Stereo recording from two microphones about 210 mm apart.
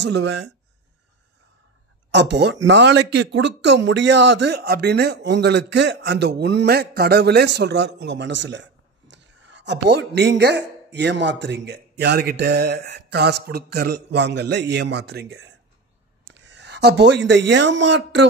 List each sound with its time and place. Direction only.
0.0 s speech: 55° right (ahead or behind)
2.0 s speech: 55° right (ahead or behind)